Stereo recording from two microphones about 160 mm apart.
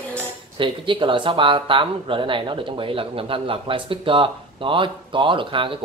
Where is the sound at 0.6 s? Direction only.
30° right (ahead or behind).